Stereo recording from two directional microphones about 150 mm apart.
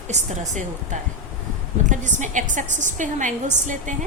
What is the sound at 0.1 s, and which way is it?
A woman's voice, 55° right (ahead or behind).